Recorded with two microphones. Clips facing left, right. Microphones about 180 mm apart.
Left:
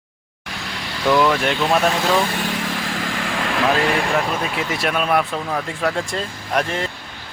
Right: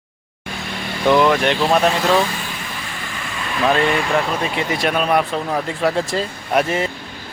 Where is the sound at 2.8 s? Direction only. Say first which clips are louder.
Left 6 dB; 90° left.